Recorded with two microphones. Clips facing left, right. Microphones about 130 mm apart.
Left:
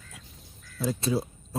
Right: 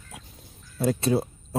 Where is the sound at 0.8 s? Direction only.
60° right (ahead or behind).